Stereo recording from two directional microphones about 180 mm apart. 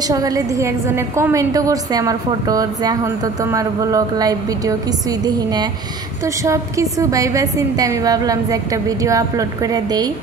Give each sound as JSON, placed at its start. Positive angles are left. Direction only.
{"t": 0.0, "sound": "a woman's voice", "side_deg": -20}